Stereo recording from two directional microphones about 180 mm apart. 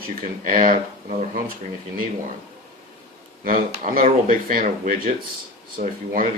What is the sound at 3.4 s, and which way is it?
Speech, 50° right (ahead or behind).